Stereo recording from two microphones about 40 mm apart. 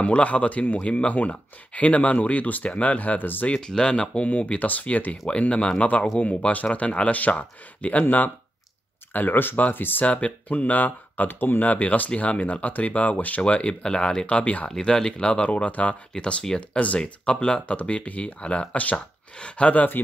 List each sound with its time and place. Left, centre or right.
0.0 s speech: left
3.2 s speech: left
3.5 s speech: left
5.4 s speech: left
10.0 s speech: left
11.6 s speech: left
14.2 s speech: left
15.4 s speech: left
17.7 s speech: left
19.7 s speech: left